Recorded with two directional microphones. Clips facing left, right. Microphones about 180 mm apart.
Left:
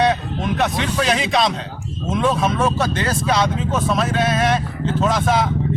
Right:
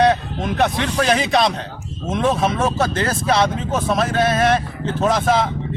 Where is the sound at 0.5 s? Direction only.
45° right (ahead or behind).